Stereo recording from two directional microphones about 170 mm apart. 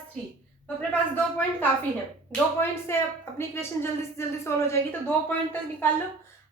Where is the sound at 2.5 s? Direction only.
15° left (ahead or behind).